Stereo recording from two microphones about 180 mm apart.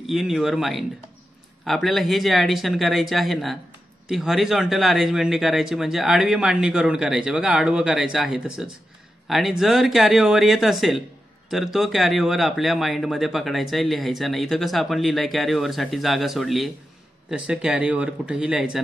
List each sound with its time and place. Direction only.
0.0 s speech: centre (ahead or behind)